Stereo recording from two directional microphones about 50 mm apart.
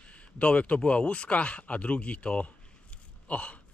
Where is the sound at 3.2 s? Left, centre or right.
Left.